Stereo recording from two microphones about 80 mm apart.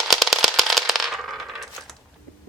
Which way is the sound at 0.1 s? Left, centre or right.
Centre.